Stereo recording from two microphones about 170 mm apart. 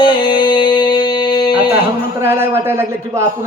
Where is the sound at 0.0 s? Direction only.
30° left (ahead or behind).